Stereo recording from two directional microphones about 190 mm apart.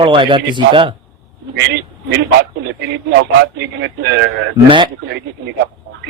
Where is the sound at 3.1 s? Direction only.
70° right (ahead or behind).